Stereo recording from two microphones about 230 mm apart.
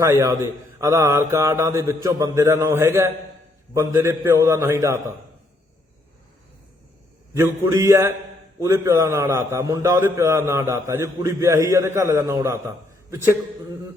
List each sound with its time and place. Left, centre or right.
0.0 s a man's voice: centre
7.3 s a man's voice: centre